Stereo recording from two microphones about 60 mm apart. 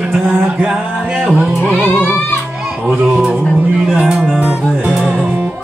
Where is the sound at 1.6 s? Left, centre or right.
Left.